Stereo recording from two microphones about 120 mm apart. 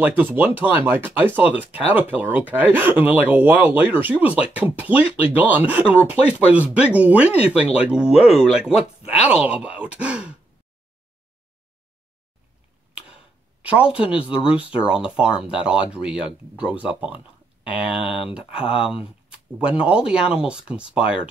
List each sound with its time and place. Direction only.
0.0 s speech: 15° right (ahead or behind)
12.9 s a sound: 10° right (ahead or behind)
14.5 s speech: 50° left (ahead or behind)
15.0 s speech: 10° right (ahead or behind)
18.0 s speech: 50° left (ahead or behind)
19.2 s speech: 10° right (ahead or behind)